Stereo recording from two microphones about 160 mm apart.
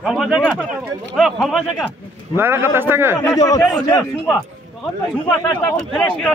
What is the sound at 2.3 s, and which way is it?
Speech, 15° right (ahead or behind).